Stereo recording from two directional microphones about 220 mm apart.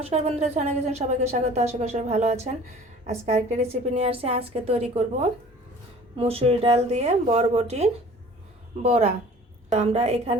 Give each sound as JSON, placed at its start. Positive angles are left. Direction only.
{"t": 0.0, "sound": "a woman's voice", "side_deg": -30}